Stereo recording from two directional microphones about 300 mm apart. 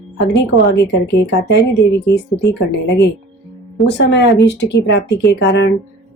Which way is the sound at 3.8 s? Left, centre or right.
Left.